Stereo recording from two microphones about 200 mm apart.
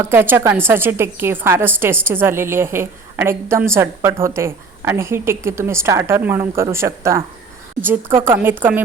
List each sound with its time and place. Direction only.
0.0 s a woman's voice: 10° right (ahead or behind)